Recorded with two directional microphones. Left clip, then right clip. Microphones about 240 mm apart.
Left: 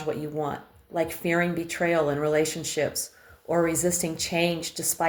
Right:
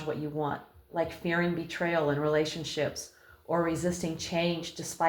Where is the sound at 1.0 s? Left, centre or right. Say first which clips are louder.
Left 5 dB; left.